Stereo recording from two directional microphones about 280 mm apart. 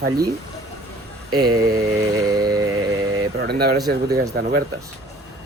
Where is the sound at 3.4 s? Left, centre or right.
Right.